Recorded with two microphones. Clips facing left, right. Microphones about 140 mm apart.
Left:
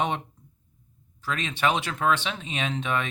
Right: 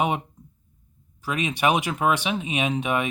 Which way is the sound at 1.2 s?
15° right (ahead or behind).